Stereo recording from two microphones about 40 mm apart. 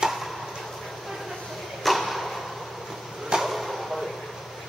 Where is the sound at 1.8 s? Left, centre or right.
Centre.